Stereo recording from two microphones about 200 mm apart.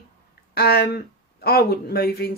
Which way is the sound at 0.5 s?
50° left (ahead or behind).